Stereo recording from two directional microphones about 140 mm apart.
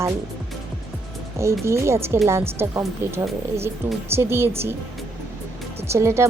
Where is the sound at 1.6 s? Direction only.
20° right (ahead or behind).